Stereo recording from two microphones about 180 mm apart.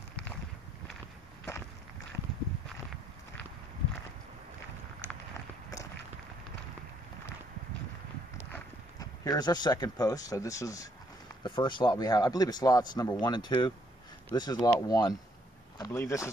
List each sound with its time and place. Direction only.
8.4 s speech: 15° left (ahead or behind)